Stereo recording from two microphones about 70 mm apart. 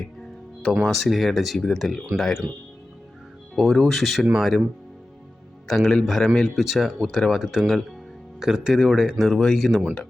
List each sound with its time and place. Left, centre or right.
0.9 s a man's voice: centre
1.5 s a man's voice: centre
3.5 s a man's voice: centre
5.6 s a man's voice: centre
9.8 s speech: centre